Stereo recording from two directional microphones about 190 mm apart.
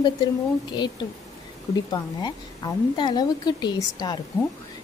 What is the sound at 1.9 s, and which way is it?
A woman's voice, 20° left (ahead or behind).